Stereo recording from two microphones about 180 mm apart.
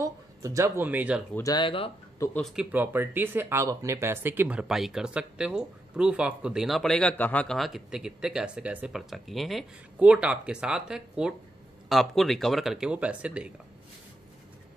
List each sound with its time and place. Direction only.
0.0 s speech: 15° right (ahead or behind)
1.3 s speech: 20° left (ahead or behind)
2.1 s speech: 15° left (ahead or behind)
2.4 s speech: 5° right (ahead or behind)